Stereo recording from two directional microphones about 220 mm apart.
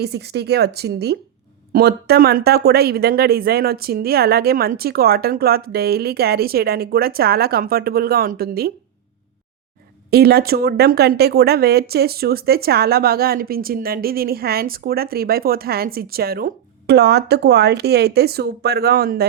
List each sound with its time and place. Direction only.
0.0 s speech: 45° right (ahead or behind)
10.1 s speech: 45° right (ahead or behind)